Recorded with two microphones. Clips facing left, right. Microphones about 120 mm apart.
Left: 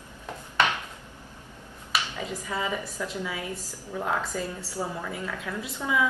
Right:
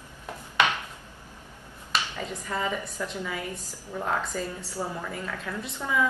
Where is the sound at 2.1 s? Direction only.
5° left (ahead or behind).